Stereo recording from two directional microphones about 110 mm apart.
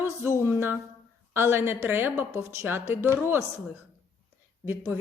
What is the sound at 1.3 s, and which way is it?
Speech, 20° right (ahead or behind).